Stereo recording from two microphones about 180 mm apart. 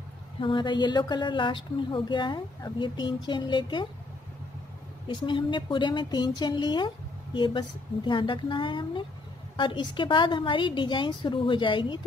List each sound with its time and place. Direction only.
0.4 s a woman's voice: 25° left (ahead or behind)
5.0 s a woman's voice: 25° left (ahead or behind)